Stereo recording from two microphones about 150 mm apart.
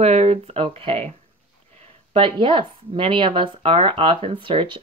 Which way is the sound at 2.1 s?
35° right (ahead or behind).